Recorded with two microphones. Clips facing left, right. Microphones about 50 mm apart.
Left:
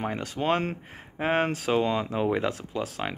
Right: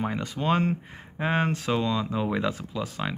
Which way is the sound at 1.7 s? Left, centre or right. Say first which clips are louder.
Left 1 dB; centre.